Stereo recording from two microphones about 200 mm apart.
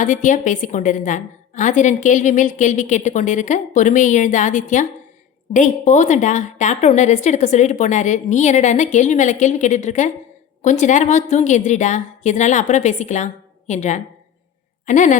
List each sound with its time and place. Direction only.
0.0 s a woman's voice: 40° left (ahead or behind)